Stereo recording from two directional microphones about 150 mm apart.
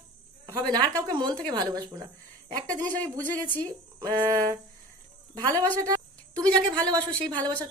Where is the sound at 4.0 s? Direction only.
25° right (ahead or behind).